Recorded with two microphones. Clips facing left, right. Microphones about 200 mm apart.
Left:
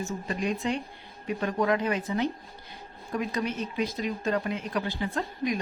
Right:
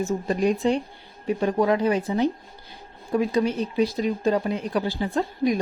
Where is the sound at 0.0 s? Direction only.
35° right (ahead or behind).